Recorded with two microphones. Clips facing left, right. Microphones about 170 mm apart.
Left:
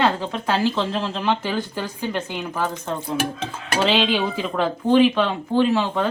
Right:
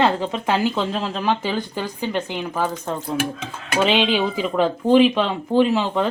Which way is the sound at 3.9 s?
10° right (ahead or behind).